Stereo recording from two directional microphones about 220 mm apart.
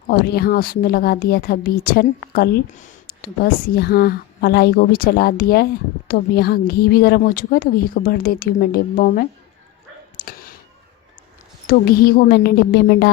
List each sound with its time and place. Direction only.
0.1 s a woman's voice: 45° left (ahead or behind)
11.7 s a woman's voice: 40° left (ahead or behind)